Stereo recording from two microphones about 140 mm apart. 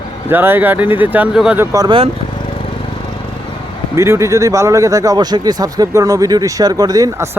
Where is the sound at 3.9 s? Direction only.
20° right (ahead or behind).